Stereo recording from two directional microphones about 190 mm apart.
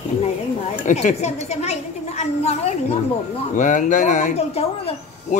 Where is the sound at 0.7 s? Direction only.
40° left (ahead or behind).